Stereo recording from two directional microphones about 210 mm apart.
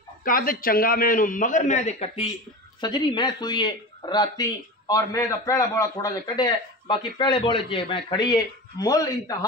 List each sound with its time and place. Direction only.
0.2 s a man's voice: 40° left (ahead or behind)
2.8 s speech: 20° left (ahead or behind)